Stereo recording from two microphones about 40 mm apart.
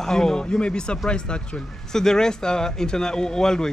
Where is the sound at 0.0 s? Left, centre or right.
Centre.